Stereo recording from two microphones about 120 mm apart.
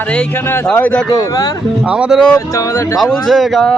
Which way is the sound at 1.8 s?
10° right (ahead or behind).